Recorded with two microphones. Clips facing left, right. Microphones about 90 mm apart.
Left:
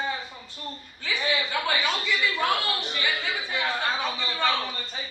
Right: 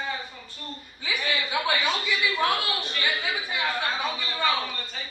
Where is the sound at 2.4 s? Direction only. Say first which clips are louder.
Even; 15° left (ahead or behind).